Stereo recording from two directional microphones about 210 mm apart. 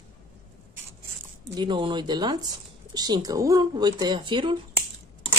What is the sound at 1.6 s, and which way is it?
Speech, 20° right (ahead or behind).